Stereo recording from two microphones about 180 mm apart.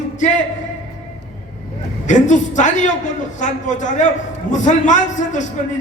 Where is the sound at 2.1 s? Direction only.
45° left (ahead or behind).